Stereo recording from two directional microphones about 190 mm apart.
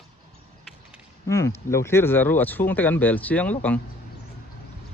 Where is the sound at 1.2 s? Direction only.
15° left (ahead or behind).